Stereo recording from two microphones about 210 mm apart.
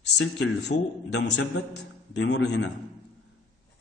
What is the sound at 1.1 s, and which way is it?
A man's voice, 55° left (ahead or behind).